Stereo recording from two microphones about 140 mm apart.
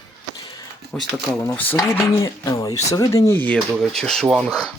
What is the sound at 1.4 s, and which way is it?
Speech, 15° left (ahead or behind).